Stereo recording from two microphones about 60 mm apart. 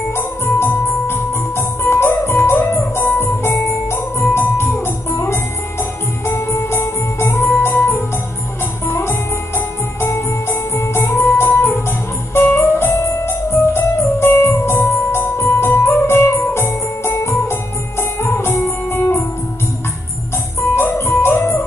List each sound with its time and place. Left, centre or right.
0.1 s music: left
6.2 s music: left
7.6 s organ: left
8.8 s music: left
20.7 s music: left